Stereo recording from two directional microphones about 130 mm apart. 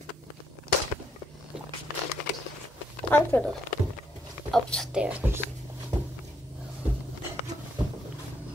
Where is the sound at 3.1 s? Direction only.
15° left (ahead or behind).